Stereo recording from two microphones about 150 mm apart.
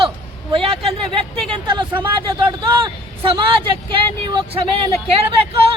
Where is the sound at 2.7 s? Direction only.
35° right (ahead or behind).